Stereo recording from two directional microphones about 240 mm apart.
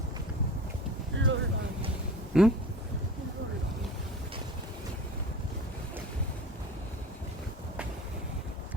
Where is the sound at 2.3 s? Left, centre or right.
Centre.